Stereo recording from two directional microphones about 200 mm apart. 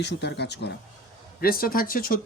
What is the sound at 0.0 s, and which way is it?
A man's voice, 60° left (ahead or behind).